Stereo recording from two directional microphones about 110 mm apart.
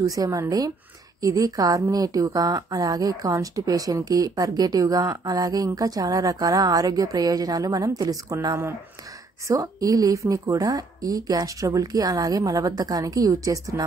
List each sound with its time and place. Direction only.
0.0 s a woman's voice: 30° right (ahead or behind)